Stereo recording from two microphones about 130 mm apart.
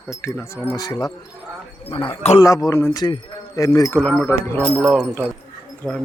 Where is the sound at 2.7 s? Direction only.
20° left (ahead or behind).